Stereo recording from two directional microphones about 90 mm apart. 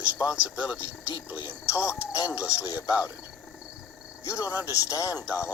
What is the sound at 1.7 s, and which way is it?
Speech, 30° left (ahead or behind).